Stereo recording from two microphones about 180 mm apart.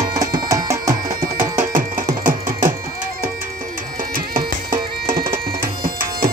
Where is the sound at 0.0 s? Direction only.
20° right (ahead or behind).